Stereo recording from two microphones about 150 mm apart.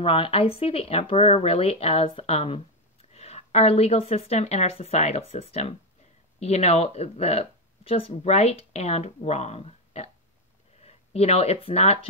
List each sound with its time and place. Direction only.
0.0 s speech: 35° left (ahead or behind)